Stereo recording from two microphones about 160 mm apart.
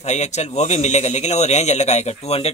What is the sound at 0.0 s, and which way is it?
Speech, 45° left (ahead or behind).